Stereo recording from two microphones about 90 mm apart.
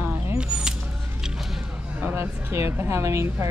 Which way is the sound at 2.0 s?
20° right (ahead or behind).